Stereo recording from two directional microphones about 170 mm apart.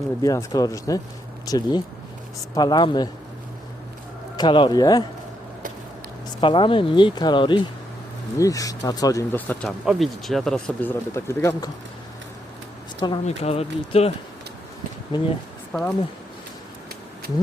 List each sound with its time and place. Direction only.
0.2 s speech: 20° left (ahead or behind)
4.4 s speech: 30° left (ahead or behind)
6.4 s speech: 30° left (ahead or behind)
9.3 s speech: 10° left (ahead or behind)
13.2 s speech: 35° left (ahead or behind)
15.1 s speech: 25° left (ahead or behind)
15.7 s speech: centre (ahead or behind)